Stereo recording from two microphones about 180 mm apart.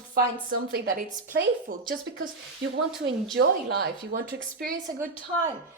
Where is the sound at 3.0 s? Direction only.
90° right.